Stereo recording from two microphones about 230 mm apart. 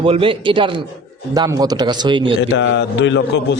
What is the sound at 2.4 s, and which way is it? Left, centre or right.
A man's voice, left.